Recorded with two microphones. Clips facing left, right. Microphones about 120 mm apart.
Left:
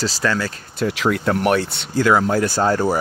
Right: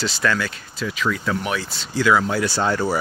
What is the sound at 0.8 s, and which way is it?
Speech, 75° left (ahead or behind).